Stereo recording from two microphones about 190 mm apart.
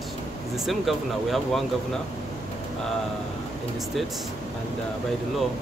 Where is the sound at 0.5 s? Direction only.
Centre (ahead or behind).